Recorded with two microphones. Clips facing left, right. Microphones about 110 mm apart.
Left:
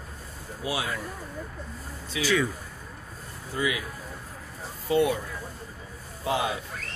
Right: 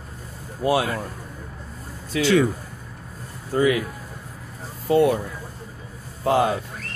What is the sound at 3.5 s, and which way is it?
Speech, 45° right (ahead or behind).